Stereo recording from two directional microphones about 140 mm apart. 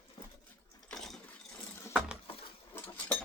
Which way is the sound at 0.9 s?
5° left (ahead or behind).